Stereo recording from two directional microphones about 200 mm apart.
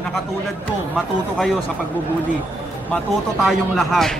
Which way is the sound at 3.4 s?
Centre (ahead or behind).